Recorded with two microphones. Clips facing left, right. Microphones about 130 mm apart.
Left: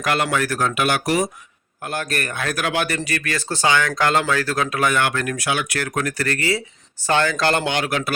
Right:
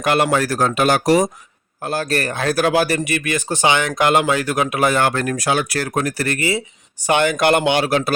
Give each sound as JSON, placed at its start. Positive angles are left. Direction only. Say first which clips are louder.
{"t": 0.0, "sound": "speech", "louder": "right 4 dB", "side_deg": -25}
{"t": 3.1, "sound": "speech", "louder": "right 4 dB", "side_deg": -20}
{"t": 4.9, "sound": "speech", "louder": "right 3 dB", "side_deg": -35}